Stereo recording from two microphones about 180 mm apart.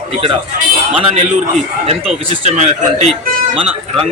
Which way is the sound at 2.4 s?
40° right (ahead or behind).